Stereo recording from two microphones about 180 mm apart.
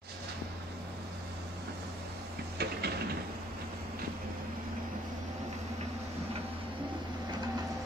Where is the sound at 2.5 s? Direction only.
65° right (ahead or behind).